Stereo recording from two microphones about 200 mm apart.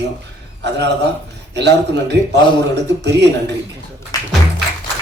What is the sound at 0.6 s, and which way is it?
Speech, 60° right (ahead or behind).